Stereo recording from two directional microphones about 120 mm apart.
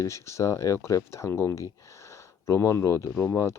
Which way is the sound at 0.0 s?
25° left (ahead or behind).